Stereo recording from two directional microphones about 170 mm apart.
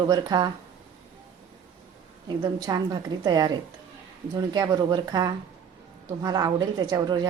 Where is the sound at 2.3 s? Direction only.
20° right (ahead or behind).